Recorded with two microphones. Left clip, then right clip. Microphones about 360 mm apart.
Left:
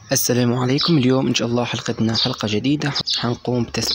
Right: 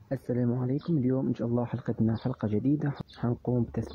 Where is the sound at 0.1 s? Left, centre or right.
Right.